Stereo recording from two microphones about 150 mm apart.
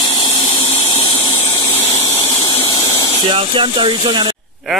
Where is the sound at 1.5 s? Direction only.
15° left (ahead or behind).